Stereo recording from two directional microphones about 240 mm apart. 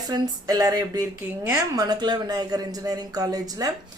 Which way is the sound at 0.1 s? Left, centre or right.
Centre.